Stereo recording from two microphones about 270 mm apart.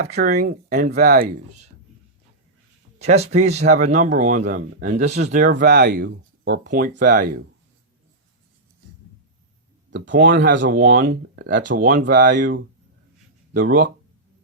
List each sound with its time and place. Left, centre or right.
0.1 s speech: right
3.0 s speech: right
9.9 s speech: right